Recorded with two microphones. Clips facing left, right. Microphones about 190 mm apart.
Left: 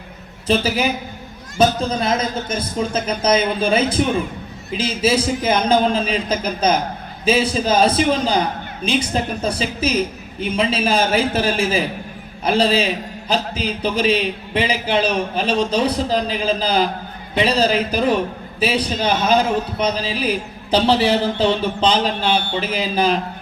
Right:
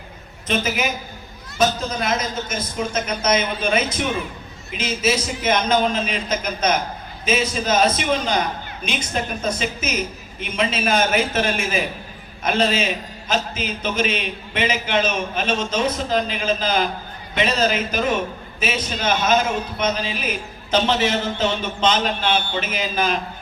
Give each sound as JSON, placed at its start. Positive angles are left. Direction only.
{"t": 0.4, "sound": "a man's voice", "side_deg": 35}